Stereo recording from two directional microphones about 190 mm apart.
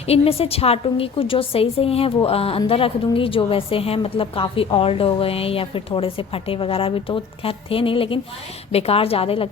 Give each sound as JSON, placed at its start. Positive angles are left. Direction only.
{"t": 0.0, "sound": "a woman's voice", "side_deg": 30}